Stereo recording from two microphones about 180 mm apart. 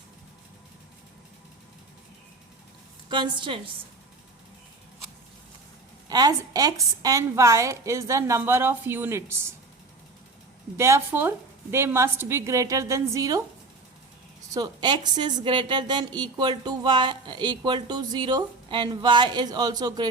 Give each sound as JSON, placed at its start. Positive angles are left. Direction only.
{"t": 3.1, "sound": "a woman's voice", "side_deg": -25}
{"t": 6.1, "sound": "a woman's voice", "side_deg": -20}
{"t": 10.8, "sound": "a woman's voice", "side_deg": -15}
{"t": 14.5, "sound": "a woman's voice", "side_deg": -25}